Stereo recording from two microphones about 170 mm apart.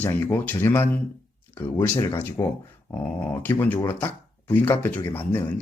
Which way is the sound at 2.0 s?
15° left (ahead or behind).